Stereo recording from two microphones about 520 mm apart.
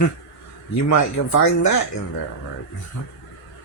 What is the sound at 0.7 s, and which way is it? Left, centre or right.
Speech, left.